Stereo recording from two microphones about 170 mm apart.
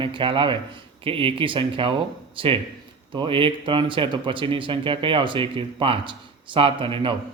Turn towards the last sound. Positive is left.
turn(degrees=-30)  # may be behind; listen again after turning